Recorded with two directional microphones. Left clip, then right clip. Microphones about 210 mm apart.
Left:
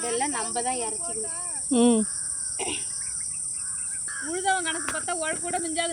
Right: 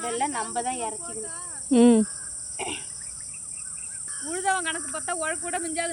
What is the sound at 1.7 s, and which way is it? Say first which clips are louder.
Speech: right 3 dB; 20° right (ahead or behind).